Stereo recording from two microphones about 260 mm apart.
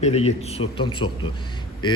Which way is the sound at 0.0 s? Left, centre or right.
Left.